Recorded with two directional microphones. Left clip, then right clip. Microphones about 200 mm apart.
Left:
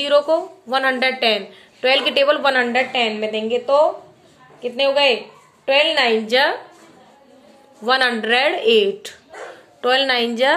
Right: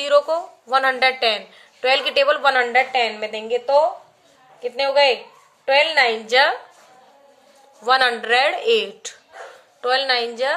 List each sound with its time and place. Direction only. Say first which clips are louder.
0.0 s a woman's voice: left 1 dB; 30° right (ahead or behind)
7.8 s speech: even; 25° right (ahead or behind)
9.8 s a woman's voice: left 2 dB; 15° right (ahead or behind)